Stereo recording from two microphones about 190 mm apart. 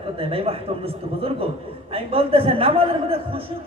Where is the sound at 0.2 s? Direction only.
30° right (ahead or behind).